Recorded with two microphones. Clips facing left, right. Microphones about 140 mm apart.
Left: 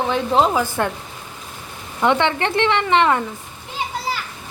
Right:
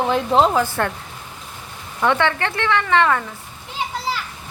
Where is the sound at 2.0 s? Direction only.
20° left (ahead or behind).